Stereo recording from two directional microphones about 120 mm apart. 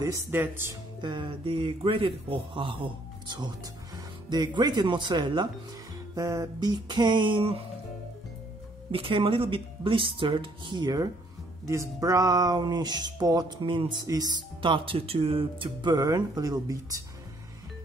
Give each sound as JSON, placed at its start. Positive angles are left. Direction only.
{"t": 0.3, "sound": "speech", "side_deg": -20}
{"t": 1.0, "sound": "a man's voice", "side_deg": -45}
{"t": 6.1, "sound": "speech", "side_deg": -30}
{"t": 8.9, "sound": "speech", "side_deg": -45}
{"t": 15.8, "sound": "speech", "side_deg": -30}